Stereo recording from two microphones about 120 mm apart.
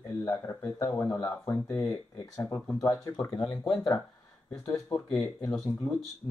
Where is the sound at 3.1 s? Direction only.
30° left (ahead or behind).